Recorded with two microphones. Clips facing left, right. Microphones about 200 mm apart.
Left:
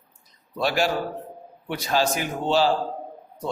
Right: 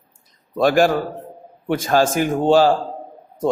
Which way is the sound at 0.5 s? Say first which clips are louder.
Right 8 dB; 50° right (ahead or behind).